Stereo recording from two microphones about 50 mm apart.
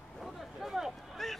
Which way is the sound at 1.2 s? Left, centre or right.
Centre.